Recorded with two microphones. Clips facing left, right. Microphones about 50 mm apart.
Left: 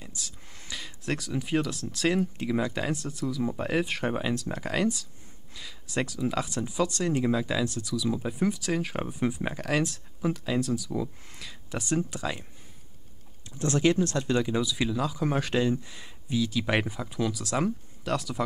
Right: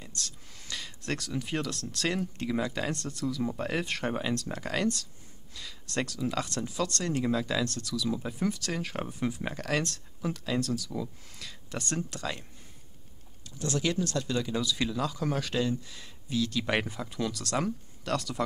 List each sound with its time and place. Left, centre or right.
0.0 s a sound: centre
0.7 s speech: centre
13.6 s speech: left; by 15.2 s centre
15.2 s speech: left; by 18.4 s centre